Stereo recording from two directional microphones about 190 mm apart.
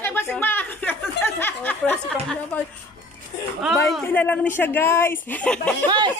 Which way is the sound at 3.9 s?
10° left (ahead or behind).